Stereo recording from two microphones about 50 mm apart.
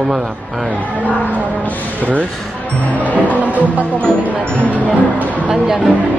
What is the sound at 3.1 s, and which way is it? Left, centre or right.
Music, right.